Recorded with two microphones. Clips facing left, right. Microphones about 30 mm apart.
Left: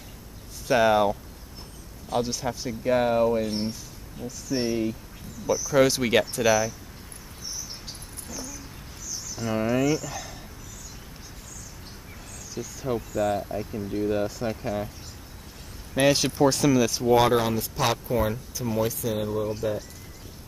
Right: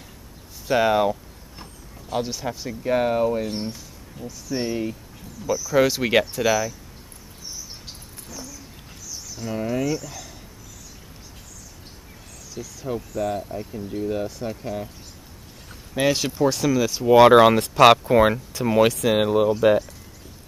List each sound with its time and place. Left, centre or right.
0.7 s speech: centre
8.3 s speech: centre
9.4 s speech: centre
12.5 s speech: centre
15.9 s speech: centre
17.3 s speech: right